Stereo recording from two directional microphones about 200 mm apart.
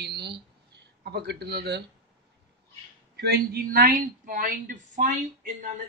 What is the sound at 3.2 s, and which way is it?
A man's voice, 45° right (ahead or behind).